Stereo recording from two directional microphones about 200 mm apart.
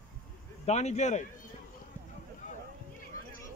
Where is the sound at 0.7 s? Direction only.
35° left (ahead or behind).